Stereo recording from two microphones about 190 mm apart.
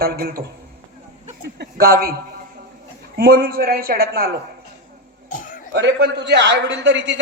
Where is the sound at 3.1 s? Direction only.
55° right (ahead or behind).